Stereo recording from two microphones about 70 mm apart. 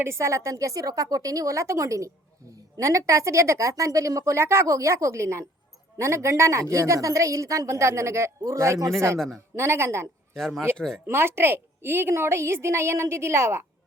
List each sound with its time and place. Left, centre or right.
0.0 s a woman's voice: right
9.1 s speech: centre
9.6 s a woman's voice: right
10.3 s speech: centre
11.0 s a woman's voice: right